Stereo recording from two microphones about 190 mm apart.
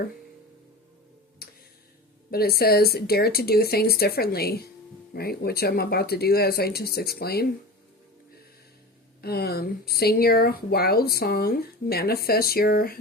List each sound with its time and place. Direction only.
1.4 s music: 50° left (ahead or behind)
2.3 s speech: 55° left (ahead or behind)
9.2 s speech: 55° left (ahead or behind)